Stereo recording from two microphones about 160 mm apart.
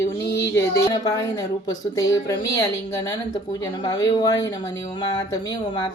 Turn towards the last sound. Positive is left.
turn(degrees=25)  # may be behind; listen again after turning